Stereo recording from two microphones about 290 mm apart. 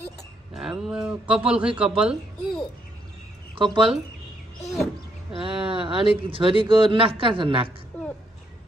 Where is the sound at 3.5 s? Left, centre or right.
Centre.